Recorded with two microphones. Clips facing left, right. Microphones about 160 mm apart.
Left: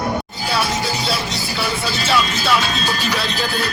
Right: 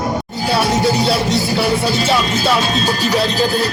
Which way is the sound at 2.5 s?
35° right (ahead or behind).